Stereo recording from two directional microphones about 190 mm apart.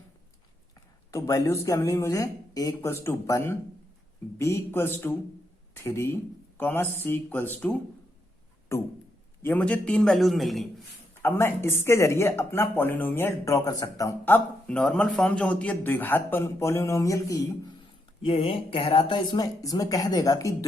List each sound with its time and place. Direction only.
1.1 s speech: 15° left (ahead or behind)
8.7 s a sound: 15° left (ahead or behind)
9.4 s a man's voice: 10° left (ahead or behind)
11.2 s speech: 15° left (ahead or behind)
18.2 s speech: 30° left (ahead or behind)